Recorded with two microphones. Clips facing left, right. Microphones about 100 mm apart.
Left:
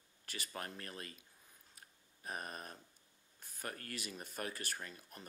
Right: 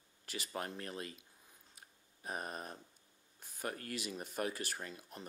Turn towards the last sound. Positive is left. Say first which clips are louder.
# right 3 dB
turn(degrees=-15)  # may be behind; listen again after turning